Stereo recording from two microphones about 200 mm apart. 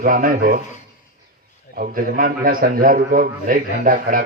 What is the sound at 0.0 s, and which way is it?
Speech, 45° right (ahead or behind).